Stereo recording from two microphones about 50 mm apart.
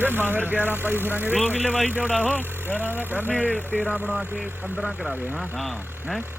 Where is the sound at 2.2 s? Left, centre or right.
Right.